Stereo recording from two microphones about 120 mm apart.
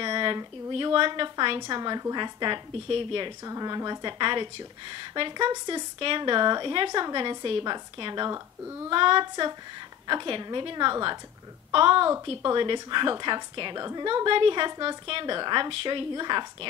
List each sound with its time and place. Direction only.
0.0 s speech: 45° right (ahead or behind)
3.4 s a woman's voice: 35° right (ahead or behind)
8.9 s a woman's voice: 45° right (ahead or behind)